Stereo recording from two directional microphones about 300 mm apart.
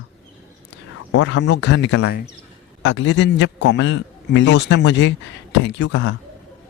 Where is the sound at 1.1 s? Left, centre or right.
Left.